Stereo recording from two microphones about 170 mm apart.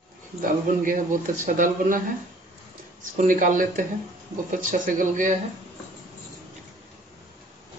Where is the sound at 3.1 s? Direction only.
50° right (ahead or behind).